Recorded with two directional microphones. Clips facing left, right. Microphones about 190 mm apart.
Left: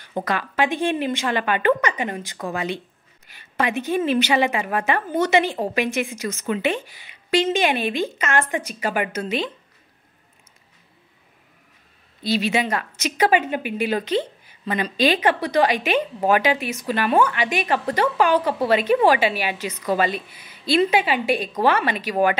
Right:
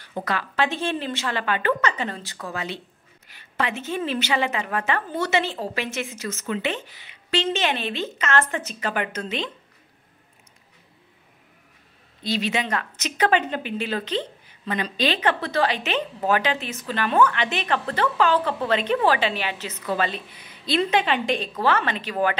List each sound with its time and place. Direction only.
0.2 s a woman's voice: 15° left (ahead or behind)
12.2 s a woman's voice: 10° left (ahead or behind)